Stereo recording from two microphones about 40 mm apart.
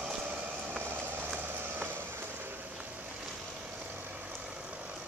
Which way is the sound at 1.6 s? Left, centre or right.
Right.